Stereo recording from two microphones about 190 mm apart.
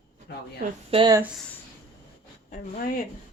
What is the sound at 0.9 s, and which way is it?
Speech, 30° right (ahead or behind).